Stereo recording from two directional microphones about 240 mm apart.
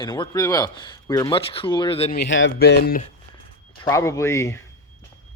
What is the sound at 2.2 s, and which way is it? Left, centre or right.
Speech, left.